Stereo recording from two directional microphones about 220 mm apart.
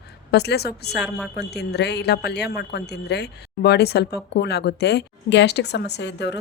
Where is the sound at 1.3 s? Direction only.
50° left (ahead or behind).